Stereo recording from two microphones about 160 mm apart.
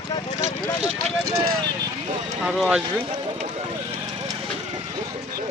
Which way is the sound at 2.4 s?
5° right (ahead or behind).